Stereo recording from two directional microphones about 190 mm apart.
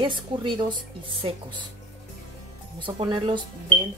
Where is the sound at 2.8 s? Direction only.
25° right (ahead or behind).